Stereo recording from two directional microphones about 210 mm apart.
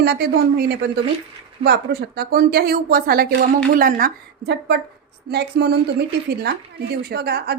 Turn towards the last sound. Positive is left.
turn(degrees=-50)  # may be behind; listen again after turning